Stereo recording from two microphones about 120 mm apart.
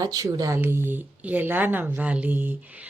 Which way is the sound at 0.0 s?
30° right (ahead or behind).